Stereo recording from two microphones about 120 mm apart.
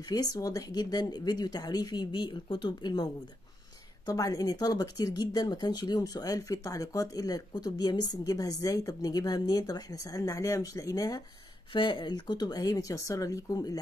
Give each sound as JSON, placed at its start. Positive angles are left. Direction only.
{"t": 0.1, "sound": "a woman's voice", "side_deg": 30}
{"t": 11.7, "sound": "speech", "side_deg": 45}